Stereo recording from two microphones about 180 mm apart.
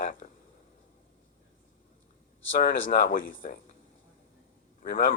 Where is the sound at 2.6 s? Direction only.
50° left (ahead or behind).